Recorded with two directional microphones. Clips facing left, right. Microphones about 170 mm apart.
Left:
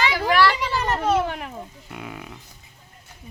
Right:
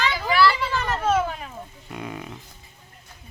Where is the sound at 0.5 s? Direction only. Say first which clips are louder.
Left 2 dB; 15° left (ahead or behind).